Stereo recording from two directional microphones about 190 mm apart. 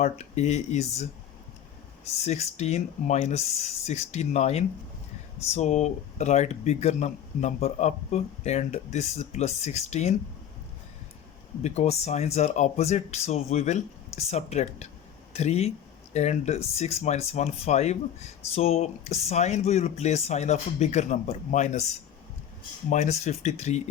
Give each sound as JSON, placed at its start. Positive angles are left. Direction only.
{"t": 0.0, "sound": "speech", "side_deg": 35}
{"t": 2.2, "sound": "speech", "side_deg": 35}
{"t": 11.6, "sound": "speech", "side_deg": 35}
{"t": 22.9, "sound": "speech", "side_deg": 40}